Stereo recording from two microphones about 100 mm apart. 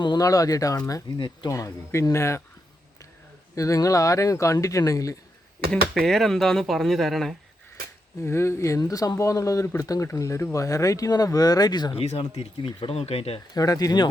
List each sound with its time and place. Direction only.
0.0 s speech: 40° left (ahead or behind)
3.5 s speech: 35° left (ahead or behind)
5.7 s speech: 5° left (ahead or behind)
8.2 s speech: 25° left (ahead or behind); by 11.9 s 45° left (ahead or behind)
11.9 s speech: 75° left (ahead or behind)
12.4 s speech: 65° left (ahead or behind); by 13.4 s 85° left
13.5 s speech: 40° left (ahead or behind)